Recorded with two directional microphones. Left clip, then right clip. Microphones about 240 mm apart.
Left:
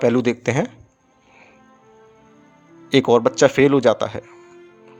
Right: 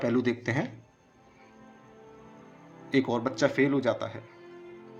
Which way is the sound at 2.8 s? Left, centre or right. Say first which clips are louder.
Left 13 dB; left.